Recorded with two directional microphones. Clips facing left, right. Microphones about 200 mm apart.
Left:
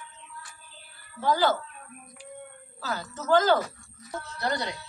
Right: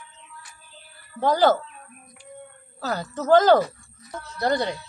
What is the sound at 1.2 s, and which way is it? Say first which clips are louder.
Speech: right 5 dB; 45° right (ahead or behind).